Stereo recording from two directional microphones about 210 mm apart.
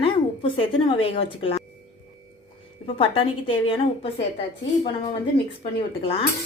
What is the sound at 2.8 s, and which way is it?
A woman's voice, 25° left (ahead or behind).